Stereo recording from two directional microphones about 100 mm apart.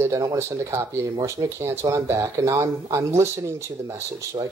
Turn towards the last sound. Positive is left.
turn(degrees=-30)  # may be behind; listen again after turning